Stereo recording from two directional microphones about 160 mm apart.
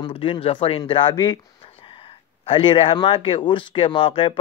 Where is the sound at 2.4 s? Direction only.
35° left (ahead or behind).